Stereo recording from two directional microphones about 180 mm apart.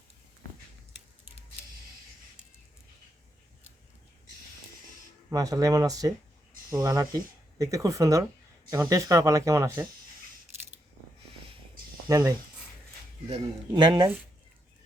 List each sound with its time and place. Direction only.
5.3 s speech: 20° right (ahead or behind)
12.0 s speech: 20° right (ahead or behind)
13.2 s speech: 30° right (ahead or behind)